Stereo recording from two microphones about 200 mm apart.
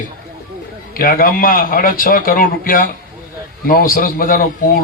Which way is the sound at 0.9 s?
45° left (ahead or behind).